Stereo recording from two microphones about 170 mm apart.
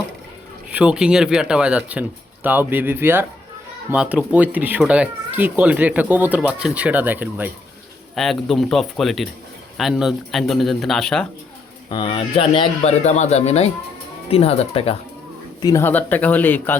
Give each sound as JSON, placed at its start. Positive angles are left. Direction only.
{"t": 0.7, "sound": "speech", "side_deg": -5}
{"t": 8.1, "sound": "a man's voice", "side_deg": 0}
{"t": 11.9, "sound": "a man's voice", "side_deg": 30}
{"t": 15.6, "sound": "speech", "side_deg": 15}